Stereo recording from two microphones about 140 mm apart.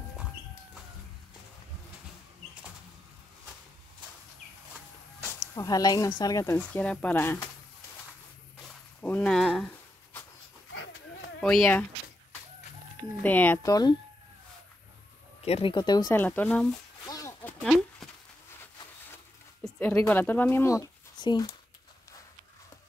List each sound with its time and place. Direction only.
5.6 s speech: 25° left (ahead or behind)
9.0 s a sound: 10° left (ahead or behind)
11.4 s speech: 5° left (ahead or behind)
13.2 s speech: 10° left (ahead or behind)
13.6 s speech: 25° left (ahead or behind)
15.4 s speech: 40° left (ahead or behind)
16.1 s speech: 15° left (ahead or behind)
17.0 s a sound: 25° left (ahead or behind)
17.4 s a sound: 10° left (ahead or behind)
19.6 s speech: 10° left (ahead or behind); by 21.5 s 30° left (ahead or behind)